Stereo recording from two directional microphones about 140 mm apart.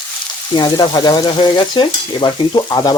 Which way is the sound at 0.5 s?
30° left (ahead or behind).